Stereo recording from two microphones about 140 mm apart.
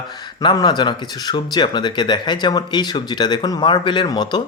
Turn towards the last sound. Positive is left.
turn(degrees=30)  # may be behind; listen again after turning